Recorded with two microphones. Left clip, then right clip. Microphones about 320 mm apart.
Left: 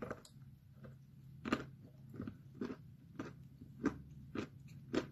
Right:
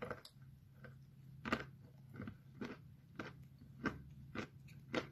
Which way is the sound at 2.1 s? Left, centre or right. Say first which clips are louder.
Left 4 dB; centre.